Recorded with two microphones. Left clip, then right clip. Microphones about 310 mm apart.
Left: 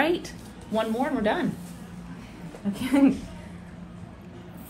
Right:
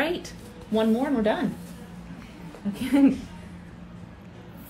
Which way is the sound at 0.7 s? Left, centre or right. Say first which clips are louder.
Right 2 dB; left.